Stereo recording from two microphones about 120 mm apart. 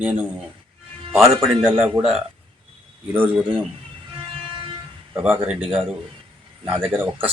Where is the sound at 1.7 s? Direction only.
15° right (ahead or behind).